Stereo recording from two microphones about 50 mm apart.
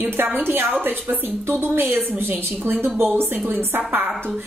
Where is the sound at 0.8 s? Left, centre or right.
Right.